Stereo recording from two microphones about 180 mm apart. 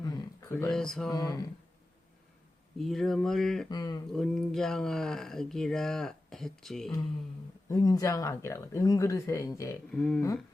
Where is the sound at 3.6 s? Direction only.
20° left (ahead or behind).